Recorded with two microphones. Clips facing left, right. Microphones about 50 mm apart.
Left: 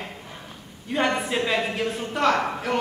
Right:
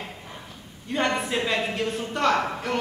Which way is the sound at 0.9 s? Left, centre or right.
Centre.